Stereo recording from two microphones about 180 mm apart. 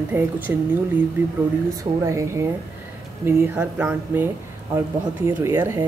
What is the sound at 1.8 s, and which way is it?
Speech, 15° right (ahead or behind).